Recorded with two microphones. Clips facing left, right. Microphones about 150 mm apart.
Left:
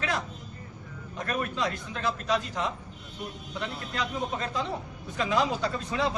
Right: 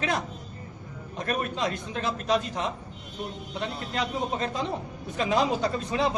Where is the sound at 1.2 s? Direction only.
25° right (ahead or behind).